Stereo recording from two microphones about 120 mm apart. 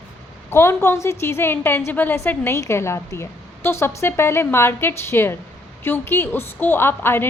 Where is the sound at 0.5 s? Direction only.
20° left (ahead or behind).